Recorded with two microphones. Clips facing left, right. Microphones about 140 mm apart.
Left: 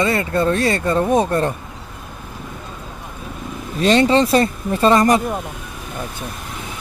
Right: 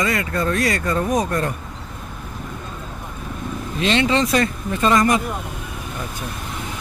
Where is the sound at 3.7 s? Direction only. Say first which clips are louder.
Left 5 dB; 40° left (ahead or behind).